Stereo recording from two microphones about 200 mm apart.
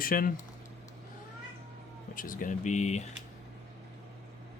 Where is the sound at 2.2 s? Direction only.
45° left (ahead or behind).